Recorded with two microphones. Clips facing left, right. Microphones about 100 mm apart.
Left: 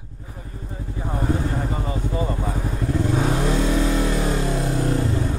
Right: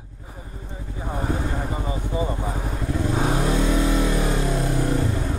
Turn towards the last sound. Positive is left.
turn(degrees=20)  # may be behind; listen again after turning